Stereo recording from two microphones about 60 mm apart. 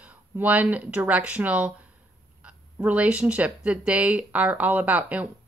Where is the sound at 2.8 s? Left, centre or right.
Right.